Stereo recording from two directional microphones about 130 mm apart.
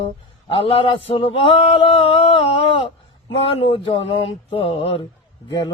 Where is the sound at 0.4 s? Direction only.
45° left (ahead or behind).